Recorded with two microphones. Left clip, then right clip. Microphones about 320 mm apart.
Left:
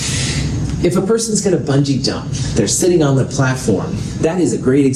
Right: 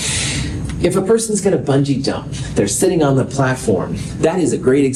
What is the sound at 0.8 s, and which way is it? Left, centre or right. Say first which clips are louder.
Speech: right 1 dB; right.